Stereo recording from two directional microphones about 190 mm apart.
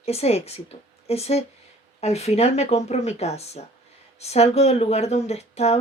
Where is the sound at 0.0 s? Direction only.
35° left (ahead or behind).